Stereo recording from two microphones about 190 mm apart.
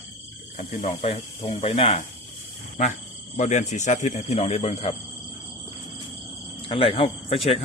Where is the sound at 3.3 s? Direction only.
40° left (ahead or behind).